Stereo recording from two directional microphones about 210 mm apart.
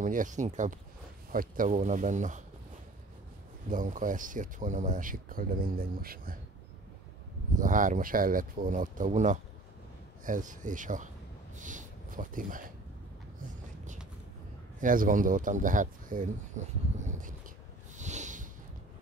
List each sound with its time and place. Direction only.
0.0 s speech: 40° right (ahead or behind)
3.6 s speech: 40° right (ahead or behind)
7.5 s speech: 40° right (ahead or behind)
14.8 s speech: 40° right (ahead or behind)
17.9 s a sound: 35° right (ahead or behind)